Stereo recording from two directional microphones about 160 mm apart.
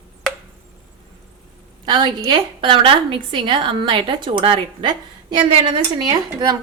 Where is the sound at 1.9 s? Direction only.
30° right (ahead or behind).